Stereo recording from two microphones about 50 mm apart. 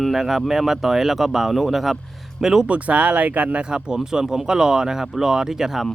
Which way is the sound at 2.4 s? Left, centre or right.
Centre.